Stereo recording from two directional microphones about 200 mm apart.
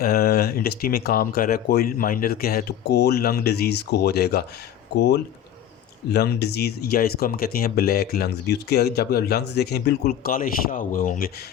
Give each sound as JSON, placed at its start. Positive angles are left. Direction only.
{"t": 0.0, "sound": "speech", "side_deg": 50}